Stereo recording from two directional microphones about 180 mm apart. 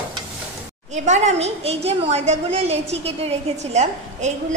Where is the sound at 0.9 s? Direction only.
40° right (ahead or behind).